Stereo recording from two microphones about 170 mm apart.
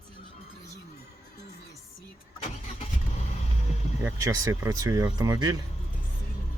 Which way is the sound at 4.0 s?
15° right (ahead or behind).